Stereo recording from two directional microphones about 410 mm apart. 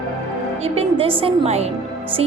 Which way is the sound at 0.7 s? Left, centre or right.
Centre.